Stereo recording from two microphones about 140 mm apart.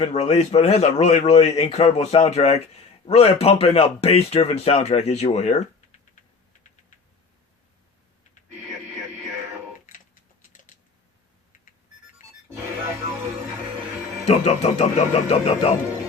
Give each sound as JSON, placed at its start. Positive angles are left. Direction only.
{"t": 0.0, "sound": "a man's voice", "side_deg": 50}
{"t": 14.3, "sound": "a man's voice", "side_deg": 50}